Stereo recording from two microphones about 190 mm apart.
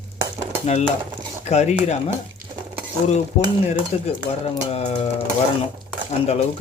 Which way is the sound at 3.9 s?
35° left (ahead or behind).